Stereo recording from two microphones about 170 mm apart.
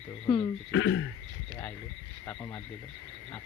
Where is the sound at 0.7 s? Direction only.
90° left.